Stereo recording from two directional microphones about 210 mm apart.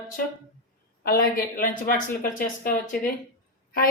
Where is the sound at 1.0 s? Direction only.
45° left (ahead or behind).